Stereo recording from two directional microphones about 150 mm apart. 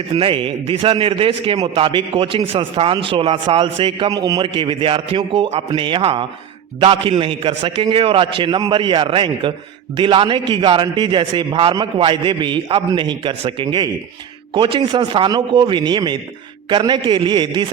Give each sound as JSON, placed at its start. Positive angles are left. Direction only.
{"t": 0.1, "sound": "a man's voice", "side_deg": -35}